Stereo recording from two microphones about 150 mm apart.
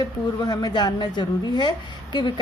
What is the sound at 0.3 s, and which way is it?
A woman's voice, 25° left (ahead or behind).